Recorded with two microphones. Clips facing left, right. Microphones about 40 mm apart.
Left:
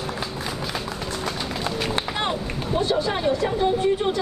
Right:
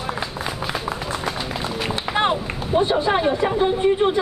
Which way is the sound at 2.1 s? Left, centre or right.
Right.